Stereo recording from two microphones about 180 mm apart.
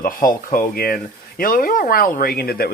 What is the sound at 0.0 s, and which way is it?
Speech, 50° left (ahead or behind).